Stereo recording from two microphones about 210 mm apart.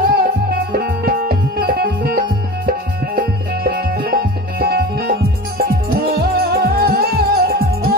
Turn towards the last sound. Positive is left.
turn(degrees=-45)  # may be behind; listen again after turning